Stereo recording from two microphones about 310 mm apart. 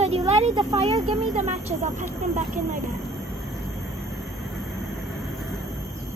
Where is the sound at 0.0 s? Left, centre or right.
Centre.